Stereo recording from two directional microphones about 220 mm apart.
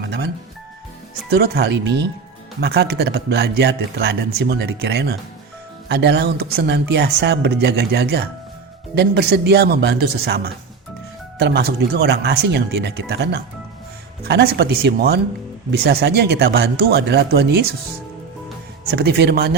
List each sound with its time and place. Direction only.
0.0 s music: 55° right (ahead or behind)
1.3 s speech: 45° right (ahead or behind)
18.9 s speech: 50° right (ahead or behind)